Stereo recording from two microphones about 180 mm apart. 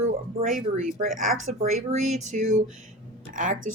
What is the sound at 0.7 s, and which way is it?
Speech, 50° right (ahead or behind).